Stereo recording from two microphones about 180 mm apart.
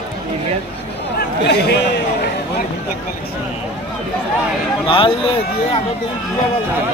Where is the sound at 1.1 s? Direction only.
70° left (ahead or behind).